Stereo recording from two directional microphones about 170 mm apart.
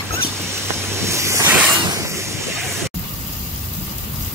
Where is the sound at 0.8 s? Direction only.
15° right (ahead or behind).